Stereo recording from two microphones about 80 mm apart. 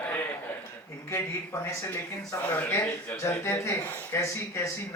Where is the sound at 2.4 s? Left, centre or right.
Centre.